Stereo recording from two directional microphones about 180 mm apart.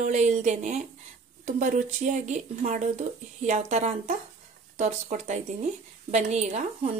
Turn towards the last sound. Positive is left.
turn(degrees=-40)  # may be behind; listen again after turning